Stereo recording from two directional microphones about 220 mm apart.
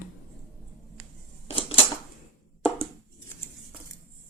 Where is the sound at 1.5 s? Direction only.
25° left (ahead or behind).